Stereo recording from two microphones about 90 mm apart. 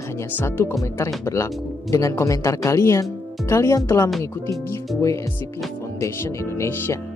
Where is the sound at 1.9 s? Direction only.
35° left (ahead or behind).